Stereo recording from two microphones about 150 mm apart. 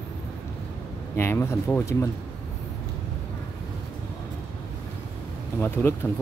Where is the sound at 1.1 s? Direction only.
15° left (ahead or behind).